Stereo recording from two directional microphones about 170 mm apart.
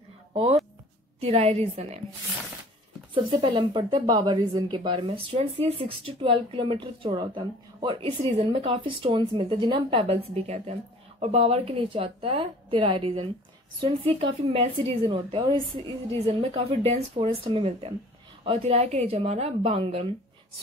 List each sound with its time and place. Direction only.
0.3 s speech: 35° right (ahead or behind)
3.3 s speech: 30° right (ahead or behind)